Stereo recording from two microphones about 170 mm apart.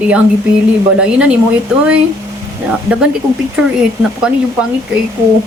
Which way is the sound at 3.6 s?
5° right (ahead or behind).